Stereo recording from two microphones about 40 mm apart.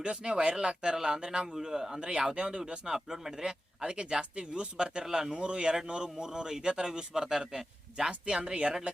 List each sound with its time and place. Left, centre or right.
0.0 s a man's voice: right